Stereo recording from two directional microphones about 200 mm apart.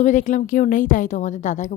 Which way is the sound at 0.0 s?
40° left (ahead or behind).